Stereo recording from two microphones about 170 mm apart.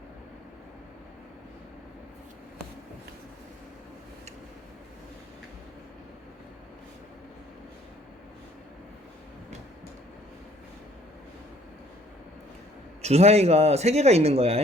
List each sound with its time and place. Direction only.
13.0 s speech: 40° right (ahead or behind)